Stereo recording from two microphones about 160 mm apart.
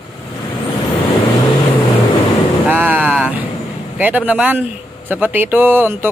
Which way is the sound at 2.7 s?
10° right (ahead or behind).